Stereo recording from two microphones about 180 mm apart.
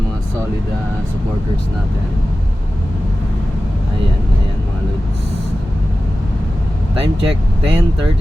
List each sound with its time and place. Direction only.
7.0 s speech: 30° right (ahead or behind)